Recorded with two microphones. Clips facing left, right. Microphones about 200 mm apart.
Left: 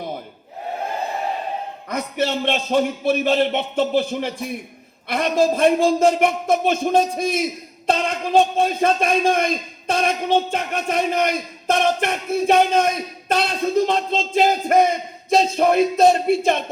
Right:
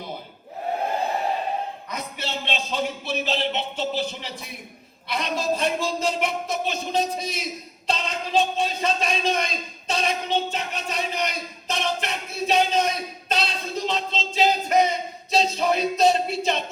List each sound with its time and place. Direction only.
1.9 s a man's voice: 50° left (ahead or behind)